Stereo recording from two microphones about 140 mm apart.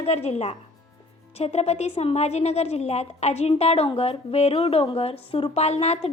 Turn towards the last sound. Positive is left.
turn(degrees=50)  # may be behind; listen again after turning